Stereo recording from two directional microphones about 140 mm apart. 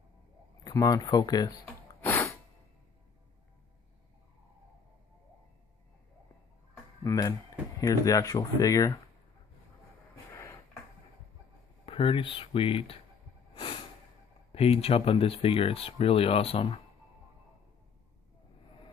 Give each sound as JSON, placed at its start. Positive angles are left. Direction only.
{"t": 0.7, "sound": "speech", "side_deg": 25}
{"t": 1.7, "sound": "a sound", "side_deg": 20}
{"t": 7.0, "sound": "speech", "side_deg": 25}
{"t": 10.3, "sound": "a sound", "side_deg": 20}
{"t": 11.8, "sound": "speech", "side_deg": 40}
{"t": 13.6, "sound": "snort", "side_deg": 40}
{"t": 14.5, "sound": "speech", "side_deg": 45}